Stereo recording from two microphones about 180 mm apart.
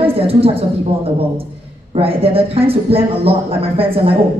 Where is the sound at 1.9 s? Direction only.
30° right (ahead or behind).